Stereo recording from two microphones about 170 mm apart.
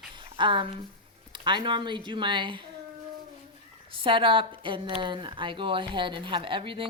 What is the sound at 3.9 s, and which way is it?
Speech, 30° right (ahead or behind).